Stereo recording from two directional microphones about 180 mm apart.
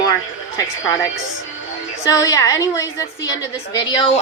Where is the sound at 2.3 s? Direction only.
20° left (ahead or behind).